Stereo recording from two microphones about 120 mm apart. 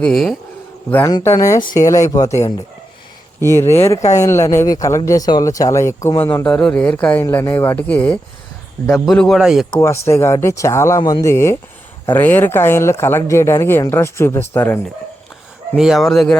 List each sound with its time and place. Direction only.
0.0 s a man's voice: centre (ahead or behind)
1.2 s speech: 25° left (ahead or behind)
3.4 s a man's voice: 20° left (ahead or behind); by 9.6 s centre (ahead or behind)
9.8 s speech: 20° left (ahead or behind)
15.7 s a man's voice: 5° right (ahead or behind)